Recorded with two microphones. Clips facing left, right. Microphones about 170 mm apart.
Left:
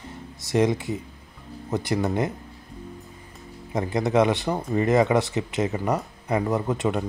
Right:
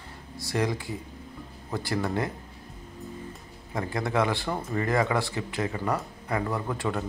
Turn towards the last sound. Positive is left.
turn(degrees=20)  # may be behind; listen again after turning